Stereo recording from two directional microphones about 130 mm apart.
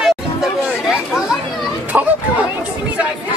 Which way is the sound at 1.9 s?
10° right (ahead or behind).